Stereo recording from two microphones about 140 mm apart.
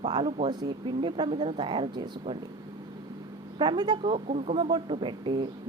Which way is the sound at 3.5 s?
30° right (ahead or behind).